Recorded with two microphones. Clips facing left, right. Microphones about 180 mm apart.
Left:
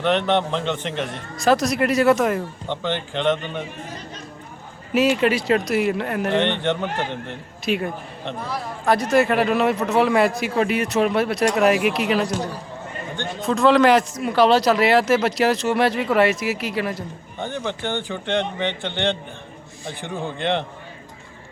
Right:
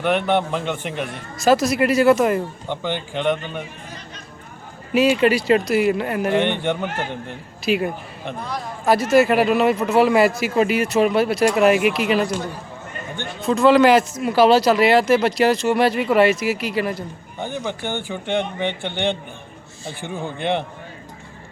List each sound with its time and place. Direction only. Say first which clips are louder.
0.0 s a man's voice: even; 10° right (ahead or behind)
4.9 s speech: right 2 dB; centre (ahead or behind)
13.4 s speech: right 2 dB; centre (ahead or behind)
17.4 s a man's voice: even; 10° right (ahead or behind)
19.8 s a man's voice: right 1 dB; 20° left (ahead or behind)
20.2 s a man's voice: right 1 dB; 15° right (ahead or behind)